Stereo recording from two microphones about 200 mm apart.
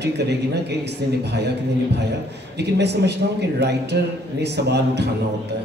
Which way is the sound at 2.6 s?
55° right (ahead or behind).